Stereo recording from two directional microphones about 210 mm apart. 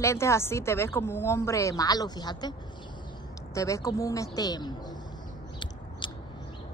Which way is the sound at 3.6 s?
15° left (ahead or behind).